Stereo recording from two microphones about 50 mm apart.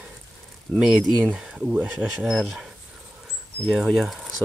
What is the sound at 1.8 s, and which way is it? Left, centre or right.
Speech, right.